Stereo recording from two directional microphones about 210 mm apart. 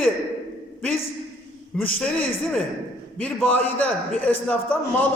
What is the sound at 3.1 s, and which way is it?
A man's voice, 5° left (ahead or behind).